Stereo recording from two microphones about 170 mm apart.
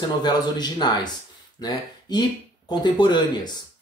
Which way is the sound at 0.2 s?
25° left (ahead or behind).